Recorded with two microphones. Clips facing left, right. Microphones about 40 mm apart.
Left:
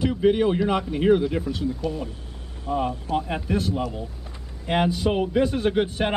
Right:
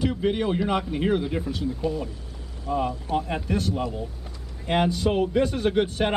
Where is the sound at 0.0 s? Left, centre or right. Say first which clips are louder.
Left 4 dB; centre.